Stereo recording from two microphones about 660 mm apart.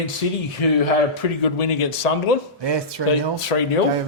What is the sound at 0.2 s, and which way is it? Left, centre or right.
A man's voice, left.